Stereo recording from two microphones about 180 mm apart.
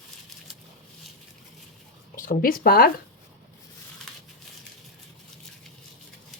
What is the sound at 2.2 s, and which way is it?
Speech, 55° left (ahead or behind).